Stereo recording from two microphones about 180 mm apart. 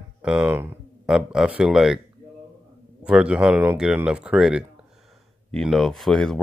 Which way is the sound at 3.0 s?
5° right (ahead or behind).